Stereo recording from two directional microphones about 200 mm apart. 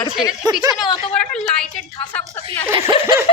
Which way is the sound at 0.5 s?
20° right (ahead or behind).